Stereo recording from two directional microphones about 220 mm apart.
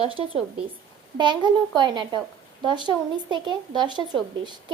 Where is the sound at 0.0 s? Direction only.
25° right (ahead or behind).